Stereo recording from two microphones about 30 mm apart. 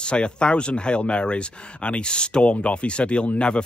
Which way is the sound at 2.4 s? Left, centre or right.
Left.